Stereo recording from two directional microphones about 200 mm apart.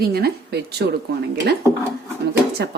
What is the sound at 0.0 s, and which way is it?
Speech, 50° right (ahead or behind).